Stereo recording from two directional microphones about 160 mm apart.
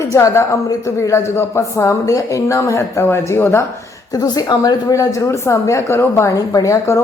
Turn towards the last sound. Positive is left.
turn(degrees=20)  # may be behind; listen again after turning